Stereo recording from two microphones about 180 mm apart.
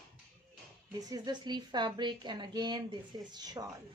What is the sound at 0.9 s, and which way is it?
A woman's voice, 20° right (ahead or behind).